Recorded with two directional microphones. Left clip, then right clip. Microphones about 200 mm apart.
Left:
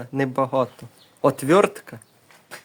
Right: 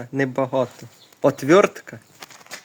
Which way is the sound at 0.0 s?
5° left (ahead or behind).